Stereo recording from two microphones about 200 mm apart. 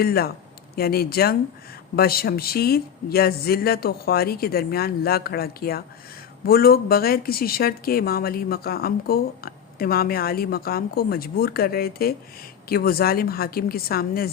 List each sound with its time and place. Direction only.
0.0 s speech: 50° left (ahead or behind)